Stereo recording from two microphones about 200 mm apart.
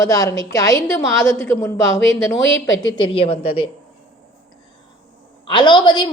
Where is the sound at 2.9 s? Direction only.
25° left (ahead or behind).